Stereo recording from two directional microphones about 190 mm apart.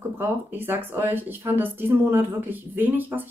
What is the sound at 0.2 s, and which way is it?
Speech, 10° right (ahead or behind).